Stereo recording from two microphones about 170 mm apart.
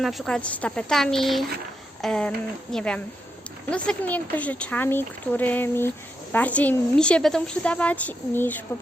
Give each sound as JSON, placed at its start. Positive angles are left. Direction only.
{"t": 0.0, "sound": "speech", "side_deg": 0}